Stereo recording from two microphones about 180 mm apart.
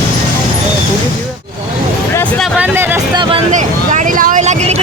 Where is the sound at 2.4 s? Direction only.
10° right (ahead or behind).